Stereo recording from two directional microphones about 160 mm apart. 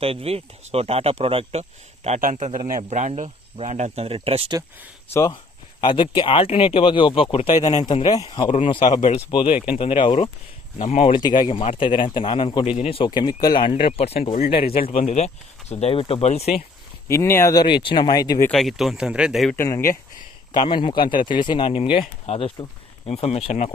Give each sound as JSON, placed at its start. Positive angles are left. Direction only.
{"t": 0.0, "sound": "speech", "side_deg": -35}
{"t": 2.0, "sound": "speech", "side_deg": -50}
{"t": 5.1, "sound": "speech", "side_deg": 20}
{"t": 7.9, "sound": "speech", "side_deg": 25}
{"t": 8.4, "sound": "speech", "side_deg": 35}
{"t": 9.3, "sound": "speech", "side_deg": 35}
{"t": 11.2, "sound": "speech", "side_deg": 30}
{"t": 13.8, "sound": "speech", "side_deg": 40}
{"t": 17.1, "sound": "speech", "side_deg": 15}
{"t": 18.4, "sound": "speech", "side_deg": 0}
{"t": 19.5, "sound": "speech", "side_deg": 20}
{"t": 20.5, "sound": "speech", "side_deg": 30}